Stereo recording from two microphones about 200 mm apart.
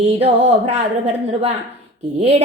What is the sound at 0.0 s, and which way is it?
A woman's voice, 35° right (ahead or behind).